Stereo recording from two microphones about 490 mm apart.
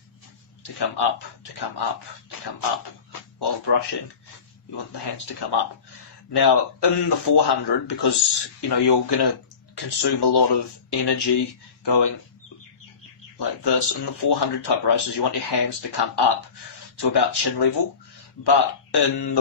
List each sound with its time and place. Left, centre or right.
0.7 s speech: left
3.1 s a sound: left
4.9 s speech: left
13.4 s speech: left